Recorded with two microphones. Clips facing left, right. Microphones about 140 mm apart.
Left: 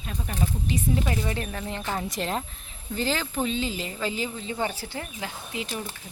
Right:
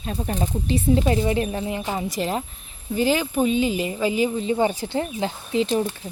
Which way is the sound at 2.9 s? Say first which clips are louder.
Right 7 dB; 15° right (ahead or behind).